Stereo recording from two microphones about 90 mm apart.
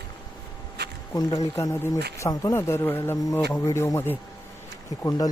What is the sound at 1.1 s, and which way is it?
Speech, 40° left (ahead or behind).